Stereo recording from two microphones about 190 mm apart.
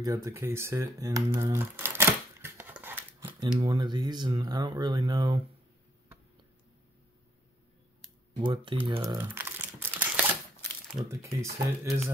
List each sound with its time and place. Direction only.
0.0 s speech: 15° right (ahead or behind)
3.5 s speech: 25° right (ahead or behind)
8.4 s speech: 25° right (ahead or behind)
9.2 s crumpling: 10° right (ahead or behind)
11.1 s speech: 15° right (ahead or behind)